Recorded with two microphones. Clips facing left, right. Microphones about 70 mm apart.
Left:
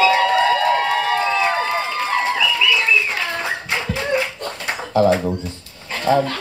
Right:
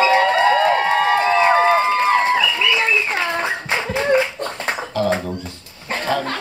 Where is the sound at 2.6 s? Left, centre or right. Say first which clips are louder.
Even; right.